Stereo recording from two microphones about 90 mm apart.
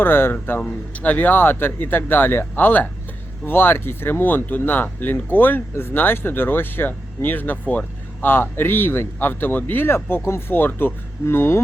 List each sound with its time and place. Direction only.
0.0 s speech: 25° left (ahead or behind)